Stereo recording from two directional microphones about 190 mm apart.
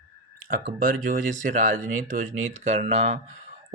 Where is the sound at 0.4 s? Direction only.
45° right (ahead or behind).